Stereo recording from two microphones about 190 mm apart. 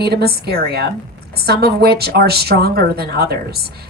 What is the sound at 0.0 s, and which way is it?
Speech, 55° right (ahead or behind).